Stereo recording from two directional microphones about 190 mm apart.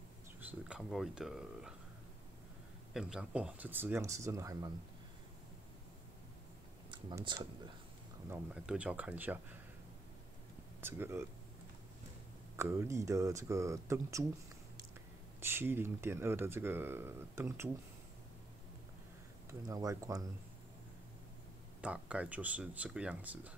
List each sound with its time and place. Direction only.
0.4 s speech: 5° right (ahead or behind)
2.9 s speech: 5° right (ahead or behind)
6.9 s speech: 25° right (ahead or behind)
8.3 s speech: 5° right (ahead or behind)
10.8 s speech: 10° right (ahead or behind)
12.5 s speech: 15° right (ahead or behind)
15.4 s speech: 10° right (ahead or behind)
19.7 s speech: 20° right (ahead or behind)
21.8 s speech: 5° right (ahead or behind)